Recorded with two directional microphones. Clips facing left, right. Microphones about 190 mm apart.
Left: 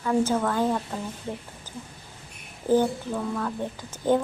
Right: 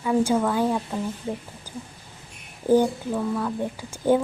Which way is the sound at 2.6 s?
15° right (ahead or behind).